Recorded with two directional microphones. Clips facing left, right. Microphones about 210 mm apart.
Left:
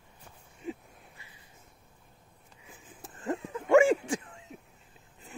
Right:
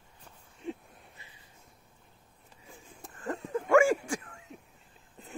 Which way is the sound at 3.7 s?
20° left (ahead or behind).